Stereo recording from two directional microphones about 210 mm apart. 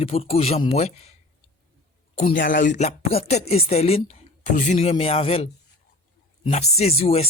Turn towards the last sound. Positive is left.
turn(degrees=30)  # may be behind; listen again after turning